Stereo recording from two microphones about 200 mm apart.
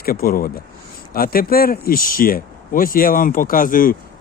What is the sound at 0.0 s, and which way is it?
Speech, 50° left (ahead or behind).